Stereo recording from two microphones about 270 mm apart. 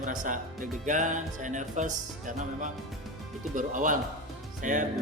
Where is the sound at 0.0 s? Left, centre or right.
Right.